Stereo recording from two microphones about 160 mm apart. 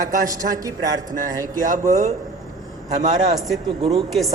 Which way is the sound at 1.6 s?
50° right (ahead or behind).